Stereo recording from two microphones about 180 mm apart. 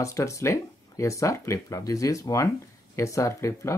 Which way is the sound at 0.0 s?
15° left (ahead or behind).